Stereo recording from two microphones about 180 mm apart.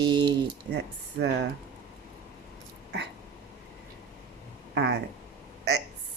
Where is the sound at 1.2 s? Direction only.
70° right (ahead or behind).